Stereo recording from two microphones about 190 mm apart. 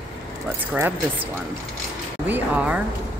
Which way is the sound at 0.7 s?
10° right (ahead or behind).